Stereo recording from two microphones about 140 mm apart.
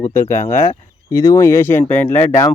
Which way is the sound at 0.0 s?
15° left (ahead or behind).